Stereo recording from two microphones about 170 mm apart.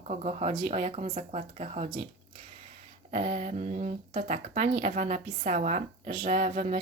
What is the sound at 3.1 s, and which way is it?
Speech, 40° right (ahead or behind).